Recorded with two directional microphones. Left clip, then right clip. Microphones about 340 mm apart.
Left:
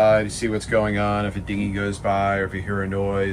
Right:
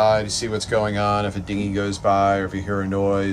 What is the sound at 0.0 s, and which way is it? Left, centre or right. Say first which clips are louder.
Speech: left 1 dB; centre.